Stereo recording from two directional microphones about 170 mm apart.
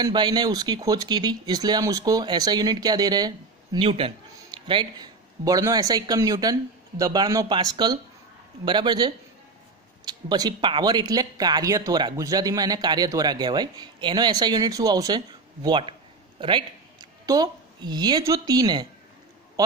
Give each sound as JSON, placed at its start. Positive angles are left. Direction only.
{"t": 0.0, "sound": "a woman's voice", "side_deg": -25}